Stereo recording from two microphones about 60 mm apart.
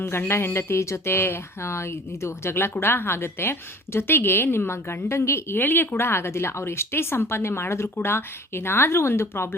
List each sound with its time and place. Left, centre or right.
0.0 s a woman's voice: left